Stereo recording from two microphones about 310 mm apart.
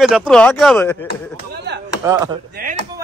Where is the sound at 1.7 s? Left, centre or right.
Right.